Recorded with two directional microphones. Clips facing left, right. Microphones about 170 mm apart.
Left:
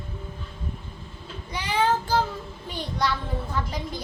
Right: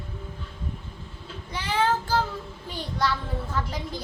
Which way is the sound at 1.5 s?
15° left (ahead or behind).